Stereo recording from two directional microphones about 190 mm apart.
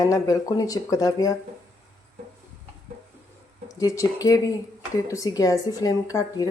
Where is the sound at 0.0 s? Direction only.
20° left (ahead or behind).